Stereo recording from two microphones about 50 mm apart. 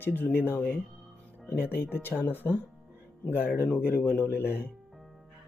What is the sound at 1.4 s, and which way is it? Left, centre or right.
Speech, left.